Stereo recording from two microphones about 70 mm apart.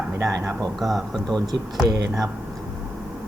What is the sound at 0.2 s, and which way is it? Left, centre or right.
Speech, right.